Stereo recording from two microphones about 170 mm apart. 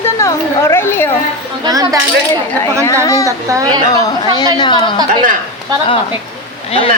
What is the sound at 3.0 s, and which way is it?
Speech, 20° left (ahead or behind).